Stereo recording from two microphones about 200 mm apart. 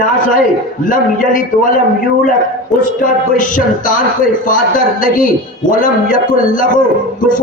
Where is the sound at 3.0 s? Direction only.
40° left (ahead or behind).